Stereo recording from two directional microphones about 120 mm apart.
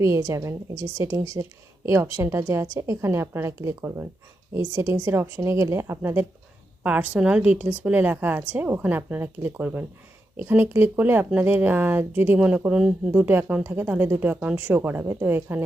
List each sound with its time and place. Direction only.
0.0 s a woman's voice: 25° right (ahead or behind)